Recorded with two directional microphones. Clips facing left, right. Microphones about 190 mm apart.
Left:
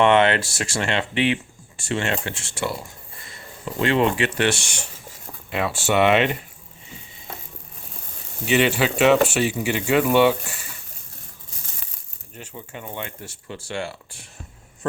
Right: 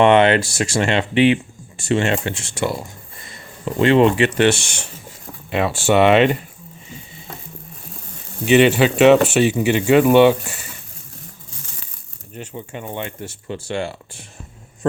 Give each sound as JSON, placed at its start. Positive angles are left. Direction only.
{"t": 0.0, "sound": "speech", "side_deg": -20}
{"t": 3.8, "sound": "speech", "side_deg": -25}
{"t": 8.4, "sound": "speech", "side_deg": -20}
{"t": 12.4, "sound": "speech", "side_deg": -25}